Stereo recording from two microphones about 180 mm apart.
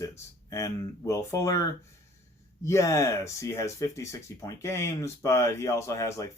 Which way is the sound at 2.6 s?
15° left (ahead or behind).